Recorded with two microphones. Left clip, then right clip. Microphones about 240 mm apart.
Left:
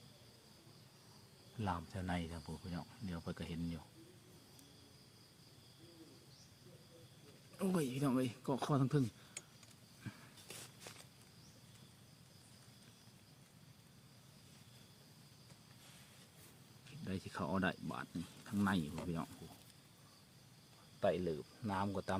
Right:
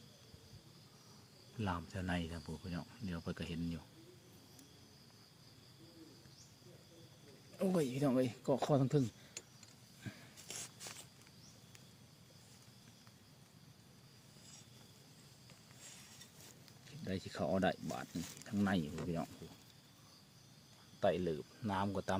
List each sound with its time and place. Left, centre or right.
1.5 s speech: centre
7.6 s speech: centre
17.0 s a sound: centre
17.9 s speech: centre
21.0 s speech: centre